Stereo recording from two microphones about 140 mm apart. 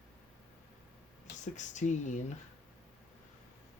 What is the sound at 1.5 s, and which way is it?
Speech, 60° left (ahead or behind).